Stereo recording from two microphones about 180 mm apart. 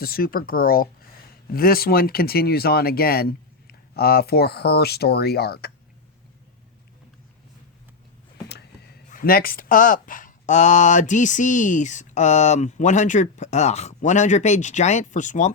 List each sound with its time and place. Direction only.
0.0 s speech: 55° left (ahead or behind)
8.4 s speech: 65° left (ahead or behind); by 15.5 s 45° left (ahead or behind)